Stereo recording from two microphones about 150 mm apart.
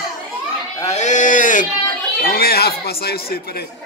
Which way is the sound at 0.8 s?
50° left (ahead or behind).